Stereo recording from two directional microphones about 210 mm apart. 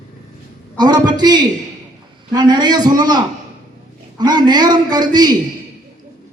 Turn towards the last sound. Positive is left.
turn(degrees=-20)  # may be behind; listen again after turning